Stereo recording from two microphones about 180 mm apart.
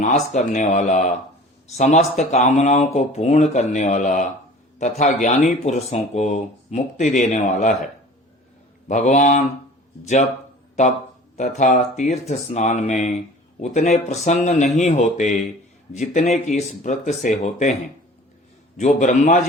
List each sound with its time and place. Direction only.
0.0 s speech: 40° left (ahead or behind)
8.9 s a man's voice: 40° left (ahead or behind)
10.8 s speech: 40° left (ahead or behind)
18.8 s a man's voice: 40° left (ahead or behind)